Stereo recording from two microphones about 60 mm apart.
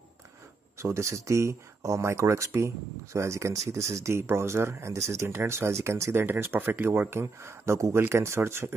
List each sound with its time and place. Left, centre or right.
0.7 s speech: right
5.3 s speech: right
6.2 s speech: right